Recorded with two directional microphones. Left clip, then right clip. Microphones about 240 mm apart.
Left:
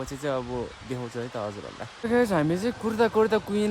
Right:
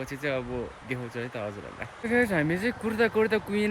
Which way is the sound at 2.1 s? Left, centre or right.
Centre.